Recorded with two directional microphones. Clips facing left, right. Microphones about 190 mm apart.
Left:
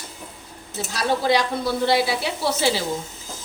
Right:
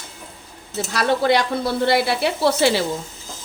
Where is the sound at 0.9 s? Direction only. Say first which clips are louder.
Right 3 dB; 60° right (ahead or behind).